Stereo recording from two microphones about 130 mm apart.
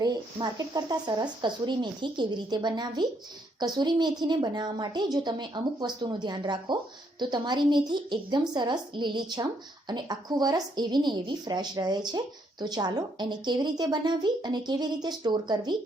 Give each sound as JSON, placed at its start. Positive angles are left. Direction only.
{"t": 0.0, "sound": "a woman's voice", "side_deg": -30}